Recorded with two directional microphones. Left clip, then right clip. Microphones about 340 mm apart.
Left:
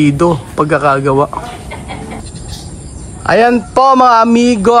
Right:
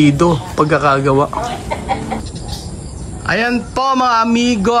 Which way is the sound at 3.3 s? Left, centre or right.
Centre.